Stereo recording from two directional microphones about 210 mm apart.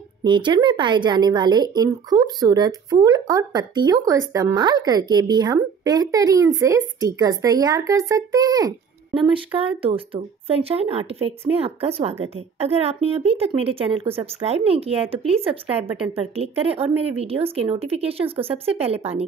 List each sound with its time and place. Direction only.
0.2 s speech: 20° right (ahead or behind)